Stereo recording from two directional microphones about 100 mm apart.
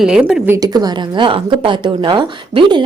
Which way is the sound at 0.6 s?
40° right (ahead or behind).